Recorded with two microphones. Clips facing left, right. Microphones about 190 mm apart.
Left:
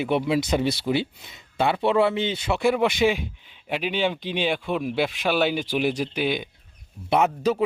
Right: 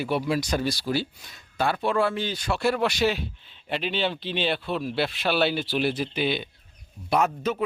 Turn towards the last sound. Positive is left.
turn(degrees=25)  # may be behind; listen again after turning